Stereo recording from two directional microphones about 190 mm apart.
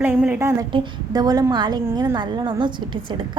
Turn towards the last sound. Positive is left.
turn(degrees=-25)  # may be behind; listen again after turning